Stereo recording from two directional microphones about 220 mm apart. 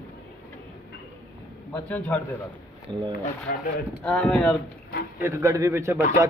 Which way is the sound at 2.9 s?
20° right (ahead or behind).